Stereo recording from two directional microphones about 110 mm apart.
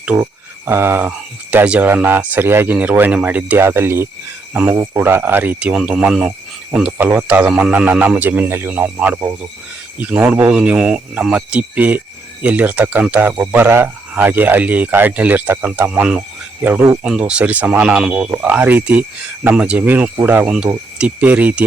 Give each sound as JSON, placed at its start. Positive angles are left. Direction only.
{"t": 0.1, "sound": "speech", "side_deg": -30}
{"t": 18.1, "sound": "speech", "side_deg": -25}
{"t": 18.3, "sound": "speech", "side_deg": -15}